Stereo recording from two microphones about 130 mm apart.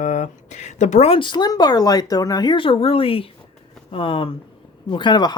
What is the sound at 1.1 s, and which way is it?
Speech, 35° left (ahead or behind).